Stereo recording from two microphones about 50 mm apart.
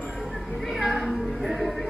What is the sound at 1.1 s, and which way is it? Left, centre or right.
Music, centre.